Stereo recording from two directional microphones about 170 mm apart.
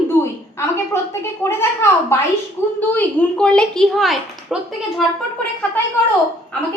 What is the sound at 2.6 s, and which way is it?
A woman's voice, 10° left (ahead or behind).